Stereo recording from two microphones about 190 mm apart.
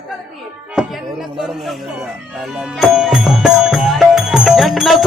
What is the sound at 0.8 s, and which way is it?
Speech, 5° right (ahead or behind).